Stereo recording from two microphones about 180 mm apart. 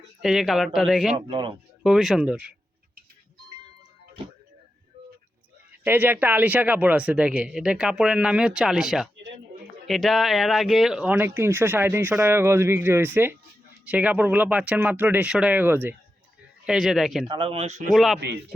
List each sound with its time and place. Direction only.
0.2 s speech: centre (ahead or behind)
1.3 s speech: 30° right (ahead or behind)
1.8 s speech: centre (ahead or behind)
5.8 s speech: 10° right (ahead or behind)
9.1 s a sound: 80° right
9.8 s speech: centre (ahead or behind)
17.2 s speech: 30° right (ahead or behind)
17.9 s speech: centre (ahead or behind)
18.2 s speech: 65° right (ahead or behind)